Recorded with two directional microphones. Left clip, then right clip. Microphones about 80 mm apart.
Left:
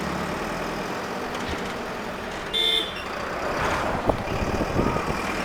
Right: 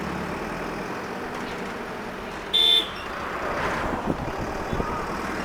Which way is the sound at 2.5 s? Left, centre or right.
Right.